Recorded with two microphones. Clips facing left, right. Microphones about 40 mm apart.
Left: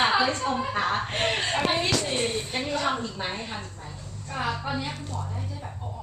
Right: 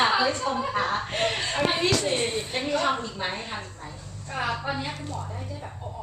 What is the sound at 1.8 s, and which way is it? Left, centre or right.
A woman's voice, centre.